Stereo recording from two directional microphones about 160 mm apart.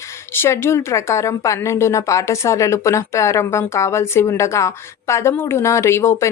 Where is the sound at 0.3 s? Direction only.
15° left (ahead or behind).